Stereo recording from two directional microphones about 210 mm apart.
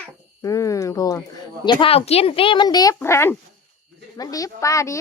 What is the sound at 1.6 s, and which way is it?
A woman's voice, 25° left (ahead or behind).